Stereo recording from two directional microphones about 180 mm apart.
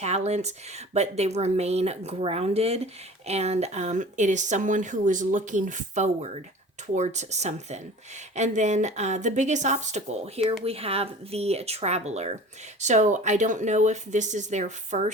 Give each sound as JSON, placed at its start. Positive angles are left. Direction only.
{"t": 0.0, "sound": "speech", "side_deg": -40}